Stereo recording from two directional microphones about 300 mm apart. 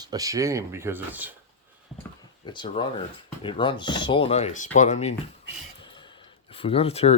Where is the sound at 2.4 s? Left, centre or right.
Centre.